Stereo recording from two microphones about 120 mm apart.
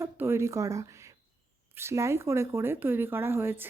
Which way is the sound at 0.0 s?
20° right (ahead or behind).